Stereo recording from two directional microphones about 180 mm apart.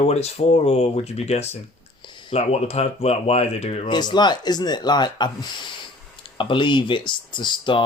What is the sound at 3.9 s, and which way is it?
Speech, 25° left (ahead or behind).